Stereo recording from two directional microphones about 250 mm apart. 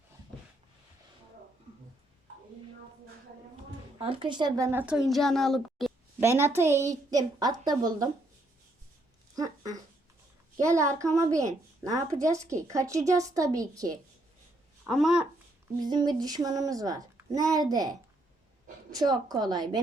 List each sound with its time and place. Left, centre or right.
3.9 s speech: right; by 6.2 s centre
6.2 s a woman's voice: centre
9.3 s a sound: centre
10.6 s a woman's voice: centre
14.8 s speech: centre
15.8 s a woman's voice: centre
18.9 s a woman's voice: centre